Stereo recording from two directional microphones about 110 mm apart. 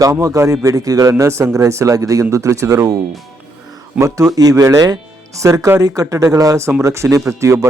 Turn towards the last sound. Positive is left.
turn(degrees=-25)  # may be behind; listen again after turning